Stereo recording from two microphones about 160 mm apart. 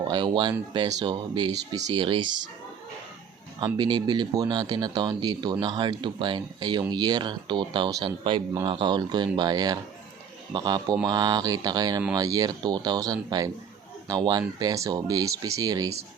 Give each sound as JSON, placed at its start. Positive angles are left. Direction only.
{"t": 0.0, "sound": "speech", "side_deg": -30}
{"t": 3.6, "sound": "speech", "side_deg": -30}